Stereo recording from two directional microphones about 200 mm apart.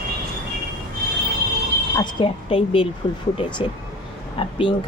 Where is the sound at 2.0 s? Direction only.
25° left (ahead or behind).